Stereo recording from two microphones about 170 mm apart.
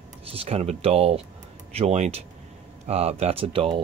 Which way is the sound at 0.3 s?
35° right (ahead or behind).